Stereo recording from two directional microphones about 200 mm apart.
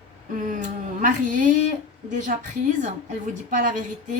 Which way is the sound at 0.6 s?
40° right (ahead or behind).